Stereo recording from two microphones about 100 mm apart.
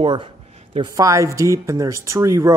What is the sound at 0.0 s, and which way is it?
Speech, 60° right (ahead or behind).